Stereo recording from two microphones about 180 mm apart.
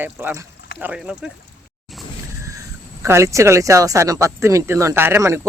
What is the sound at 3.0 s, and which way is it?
Speech, 15° right (ahead or behind).